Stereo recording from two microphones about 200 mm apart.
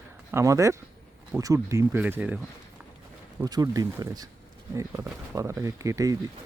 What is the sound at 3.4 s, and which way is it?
Speech, 20° right (ahead or behind).